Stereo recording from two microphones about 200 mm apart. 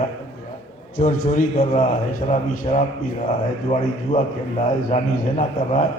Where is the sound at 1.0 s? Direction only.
40° left (ahead or behind).